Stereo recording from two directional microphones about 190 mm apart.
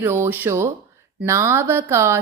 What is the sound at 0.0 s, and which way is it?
A woman's voice, 10° right (ahead or behind).